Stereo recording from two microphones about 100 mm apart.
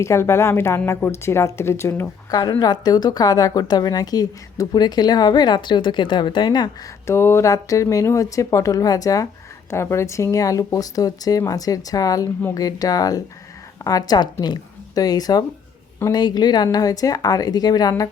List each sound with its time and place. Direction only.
0.0 s speech: 30° left (ahead or behind)
2.3 s a woman's voice: 40° left (ahead or behind)
7.1 s a woman's voice: 25° left (ahead or behind)